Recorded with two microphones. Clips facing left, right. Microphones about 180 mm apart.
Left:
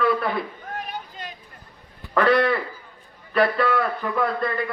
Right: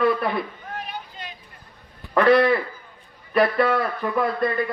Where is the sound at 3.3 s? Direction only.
15° right (ahead or behind).